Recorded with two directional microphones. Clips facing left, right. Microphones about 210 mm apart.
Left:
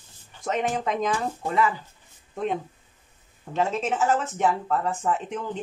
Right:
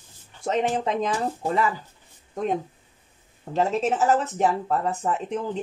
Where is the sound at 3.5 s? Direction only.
35° right (ahead or behind).